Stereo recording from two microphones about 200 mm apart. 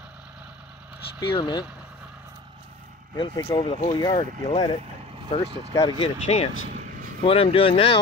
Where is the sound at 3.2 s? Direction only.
20° left (ahead or behind).